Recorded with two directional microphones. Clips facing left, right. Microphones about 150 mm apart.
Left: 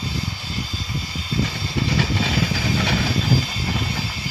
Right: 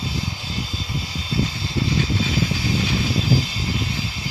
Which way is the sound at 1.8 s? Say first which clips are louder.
Left 1 dB; 75° left (ahead or behind).